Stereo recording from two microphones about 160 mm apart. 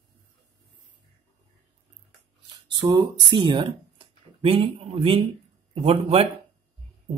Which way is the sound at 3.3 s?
30° right (ahead or behind).